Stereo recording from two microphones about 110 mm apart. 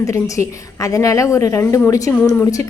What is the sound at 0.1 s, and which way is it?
A woman's voice, 30° left (ahead or behind).